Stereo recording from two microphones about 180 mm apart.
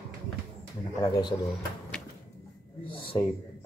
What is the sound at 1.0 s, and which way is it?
Speech, 20° left (ahead or behind).